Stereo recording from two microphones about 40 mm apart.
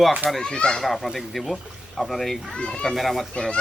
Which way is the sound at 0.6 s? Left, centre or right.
Left.